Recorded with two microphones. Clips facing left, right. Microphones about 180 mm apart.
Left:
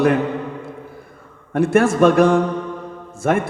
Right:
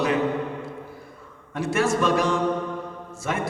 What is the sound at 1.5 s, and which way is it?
A man's voice, 55° left (ahead or behind).